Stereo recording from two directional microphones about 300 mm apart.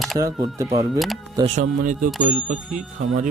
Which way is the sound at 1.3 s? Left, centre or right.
Right.